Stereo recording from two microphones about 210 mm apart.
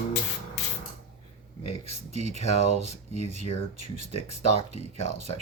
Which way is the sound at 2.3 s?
30° left (ahead or behind).